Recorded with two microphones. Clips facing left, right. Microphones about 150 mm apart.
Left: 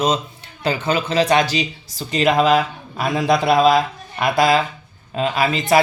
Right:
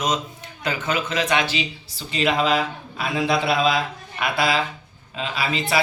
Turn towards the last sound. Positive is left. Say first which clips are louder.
# left 7 dB
turn(degrees=45)  # may be behind; listen again after turning